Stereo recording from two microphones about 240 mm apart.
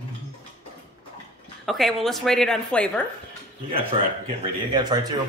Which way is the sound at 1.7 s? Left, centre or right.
Centre.